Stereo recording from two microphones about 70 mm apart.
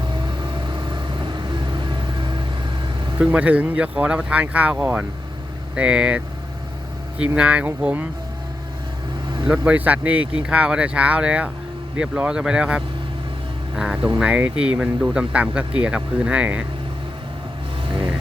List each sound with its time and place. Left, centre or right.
1.3 s vehicle: right
3.2 s speech: centre
7.3 s speech: centre
9.5 s speech: right